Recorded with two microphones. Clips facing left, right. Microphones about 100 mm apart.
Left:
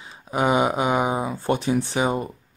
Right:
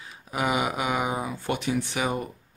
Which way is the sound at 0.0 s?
30° left (ahead or behind).